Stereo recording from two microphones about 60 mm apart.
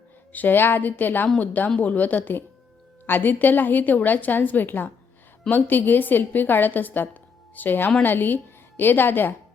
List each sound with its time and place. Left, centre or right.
0.3 s a woman's voice: left